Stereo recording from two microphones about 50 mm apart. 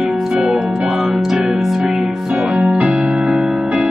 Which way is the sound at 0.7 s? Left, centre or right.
Centre.